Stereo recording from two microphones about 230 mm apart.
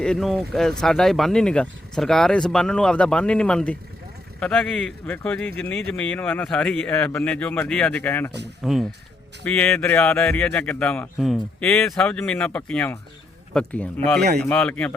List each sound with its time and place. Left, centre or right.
0.0 s speech: centre